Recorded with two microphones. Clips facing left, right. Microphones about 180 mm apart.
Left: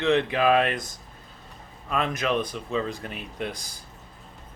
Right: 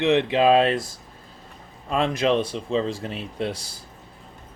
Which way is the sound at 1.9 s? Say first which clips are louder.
Right 5 dB; 30° right (ahead or behind).